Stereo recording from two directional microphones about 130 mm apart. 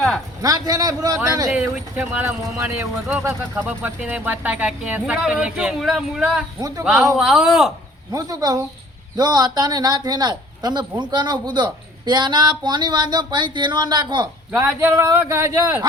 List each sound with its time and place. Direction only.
0.4 s speech: 30° right (ahead or behind)
1.5 s speech: 5° right (ahead or behind)
6.6 s speech: 30° right (ahead or behind)
6.8 s a man's voice: 5° right (ahead or behind)
8.1 s a man's voice: 30° right (ahead or behind)
14.8 s speech: 20° right (ahead or behind)